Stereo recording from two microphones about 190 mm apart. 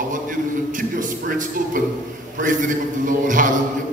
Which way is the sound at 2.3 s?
45° right (ahead or behind).